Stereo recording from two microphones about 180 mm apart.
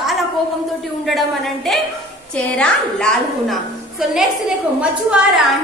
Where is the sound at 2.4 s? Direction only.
5° left (ahead or behind).